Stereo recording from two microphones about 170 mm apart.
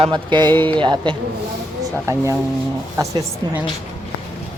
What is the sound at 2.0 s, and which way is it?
Speech, 15° right (ahead or behind).